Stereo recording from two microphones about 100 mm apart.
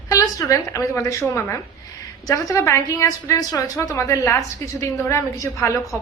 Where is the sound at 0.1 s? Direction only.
35° left (ahead or behind).